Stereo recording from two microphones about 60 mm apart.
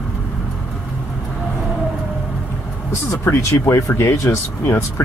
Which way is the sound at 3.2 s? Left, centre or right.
Left.